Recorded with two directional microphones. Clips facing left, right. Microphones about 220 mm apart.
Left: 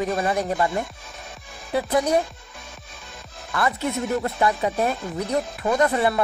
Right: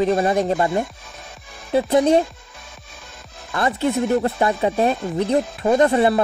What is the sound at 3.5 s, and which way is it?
Speech, 25° right (ahead or behind).